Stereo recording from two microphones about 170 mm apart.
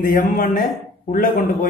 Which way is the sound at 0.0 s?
55° left (ahead or behind).